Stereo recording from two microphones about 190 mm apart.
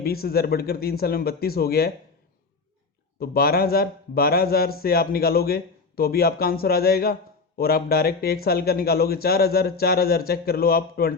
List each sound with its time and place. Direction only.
0.0 s a man's voice: 55° left (ahead or behind)
3.2 s a man's voice: 55° left (ahead or behind)